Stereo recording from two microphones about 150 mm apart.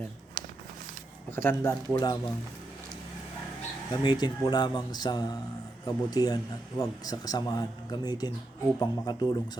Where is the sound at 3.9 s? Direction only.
30° left (ahead or behind).